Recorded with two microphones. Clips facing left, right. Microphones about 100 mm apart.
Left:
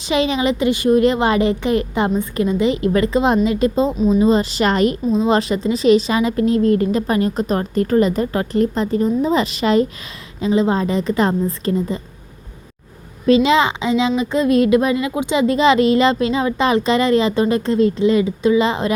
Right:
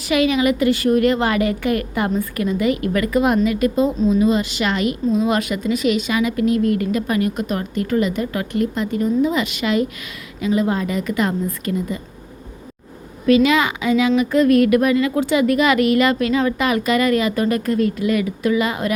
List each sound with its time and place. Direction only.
0.0 s a woman's voice: 25° left (ahead or behind)
13.2 s speech: 25° left (ahead or behind)